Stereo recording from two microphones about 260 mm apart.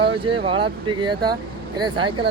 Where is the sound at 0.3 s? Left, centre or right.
Centre.